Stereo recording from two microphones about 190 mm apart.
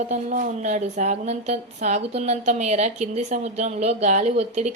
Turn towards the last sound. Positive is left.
turn(degrees=-35)  # may be behind; listen again after turning